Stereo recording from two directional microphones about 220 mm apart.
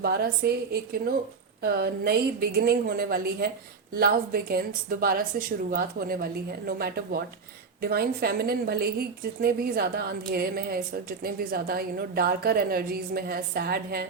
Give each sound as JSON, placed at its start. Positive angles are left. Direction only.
{"t": 0.0, "sound": "a woman's voice", "side_deg": -45}